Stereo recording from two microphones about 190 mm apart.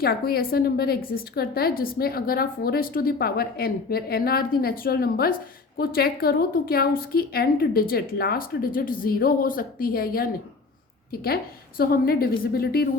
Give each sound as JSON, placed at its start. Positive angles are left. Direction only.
{"t": 0.0, "sound": "a woman's voice", "side_deg": 55}